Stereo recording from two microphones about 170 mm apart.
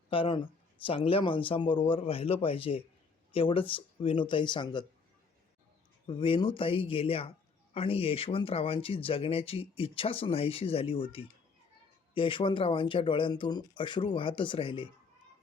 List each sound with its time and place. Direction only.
0.1 s a man's voice: 30° left (ahead or behind)
6.1 s a man's voice: 30° left (ahead or behind)